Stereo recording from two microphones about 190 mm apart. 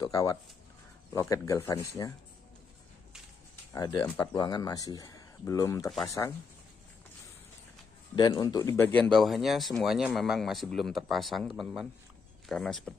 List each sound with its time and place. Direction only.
0.0 s speech: 20° left (ahead or behind)
3.7 s speech: 20° left (ahead or behind)
8.2 s speech: 20° left (ahead or behind)
9.1 s speech: centre (ahead or behind)